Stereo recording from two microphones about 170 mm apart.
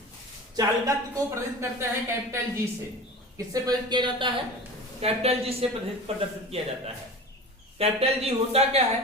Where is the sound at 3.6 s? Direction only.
25° right (ahead or behind).